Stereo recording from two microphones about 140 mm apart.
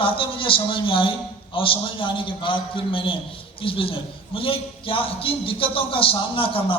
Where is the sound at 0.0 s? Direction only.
40° left (ahead or behind).